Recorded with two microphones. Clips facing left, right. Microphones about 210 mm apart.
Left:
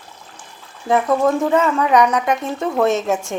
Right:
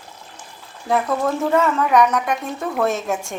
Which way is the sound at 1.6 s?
Centre (ahead or behind).